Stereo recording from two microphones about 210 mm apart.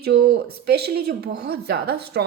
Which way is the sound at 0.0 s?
50° right (ahead or behind).